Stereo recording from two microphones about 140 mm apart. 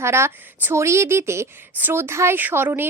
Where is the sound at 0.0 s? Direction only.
20° right (ahead or behind).